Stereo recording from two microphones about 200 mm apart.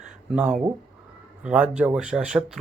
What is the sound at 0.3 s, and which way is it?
Speech, 5° right (ahead or behind).